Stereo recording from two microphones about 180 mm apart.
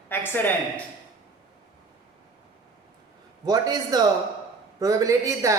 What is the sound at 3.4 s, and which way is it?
A man's voice, 20° right (ahead or behind).